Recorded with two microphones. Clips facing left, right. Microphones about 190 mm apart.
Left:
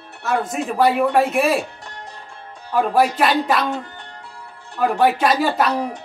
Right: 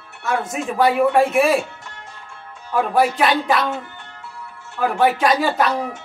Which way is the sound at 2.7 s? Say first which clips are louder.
Left 1 dB; centre (ahead or behind).